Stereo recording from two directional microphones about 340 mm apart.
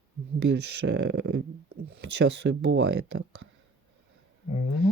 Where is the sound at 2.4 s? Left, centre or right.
Right.